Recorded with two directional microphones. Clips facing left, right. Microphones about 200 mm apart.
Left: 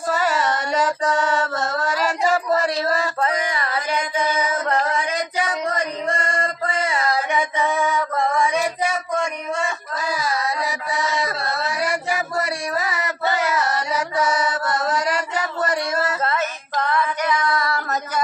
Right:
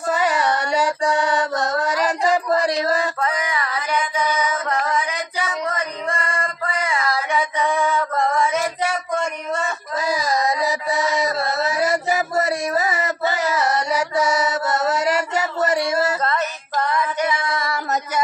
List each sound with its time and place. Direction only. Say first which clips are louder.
0.1 s child singing: right 2 dB; 15° right (ahead or behind)
3.2 s music: left 1 dB; 30° left (ahead or behind)
5.8 s a sound: left 2 dB; 25° left (ahead or behind)
7.5 s female singing: right 1 dB; 5° left (ahead or behind)
8.2 s mantra: even; centre (ahead or behind)
9.5 s a sound: even; 5° right (ahead or behind)
11.3 s a sound: right 4 dB; 20° right (ahead or behind)
14.6 s mantra: right 2 dB; 5° right (ahead or behind)
16.2 s a sound: even; 5° left (ahead or behind)
16.7 s female singing: even; 10° right (ahead or behind)
17.2 s female singing: left 1 dB; 25° right (ahead or behind)
17.7 s singing: right 2 dB; 20° right (ahead or behind)